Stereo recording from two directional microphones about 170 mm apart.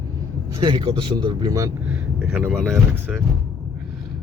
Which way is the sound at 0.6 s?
25° right (ahead or behind).